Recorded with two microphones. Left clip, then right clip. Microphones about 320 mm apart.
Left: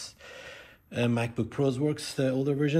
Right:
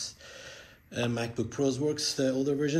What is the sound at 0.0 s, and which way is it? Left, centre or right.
A man's voice, centre.